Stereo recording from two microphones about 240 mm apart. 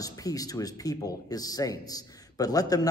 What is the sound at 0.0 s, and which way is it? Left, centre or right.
Speech, centre.